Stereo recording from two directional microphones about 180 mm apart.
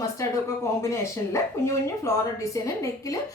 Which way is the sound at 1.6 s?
15° left (ahead or behind).